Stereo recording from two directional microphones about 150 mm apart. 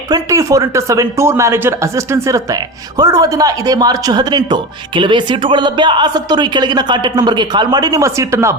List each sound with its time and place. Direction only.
0.1 s a man's voice: 20° right (ahead or behind)